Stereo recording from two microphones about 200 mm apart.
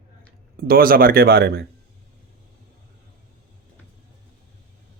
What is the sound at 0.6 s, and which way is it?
Speech, 45° right (ahead or behind).